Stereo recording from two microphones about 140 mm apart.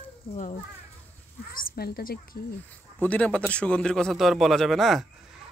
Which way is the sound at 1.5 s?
90° left.